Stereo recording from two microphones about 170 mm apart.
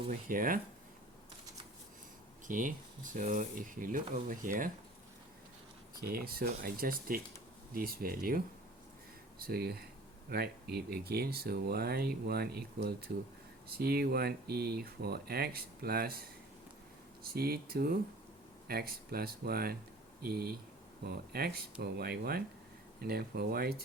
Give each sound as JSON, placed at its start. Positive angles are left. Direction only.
{"t": 0.1, "sound": "speech", "side_deg": -55}
{"t": 2.5, "sound": "speech", "side_deg": -50}
{"t": 6.0, "sound": "speech", "side_deg": -60}
{"t": 9.4, "sound": "speech", "side_deg": -65}
{"t": 17.3, "sound": "speech", "side_deg": -60}